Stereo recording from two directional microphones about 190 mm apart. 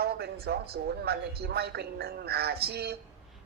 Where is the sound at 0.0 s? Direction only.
55° right (ahead or behind).